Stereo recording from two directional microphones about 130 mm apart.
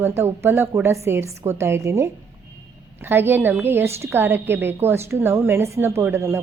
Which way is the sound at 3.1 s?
15° right (ahead or behind).